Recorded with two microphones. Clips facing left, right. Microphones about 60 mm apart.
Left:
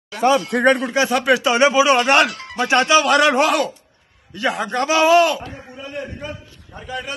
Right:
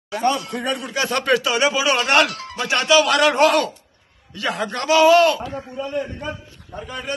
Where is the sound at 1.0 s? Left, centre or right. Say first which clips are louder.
Left 1 dB; centre.